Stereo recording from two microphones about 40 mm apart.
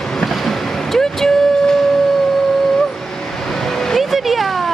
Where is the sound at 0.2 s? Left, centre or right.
Centre.